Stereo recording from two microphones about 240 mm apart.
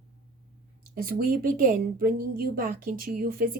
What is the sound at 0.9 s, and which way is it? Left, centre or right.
Speech, right.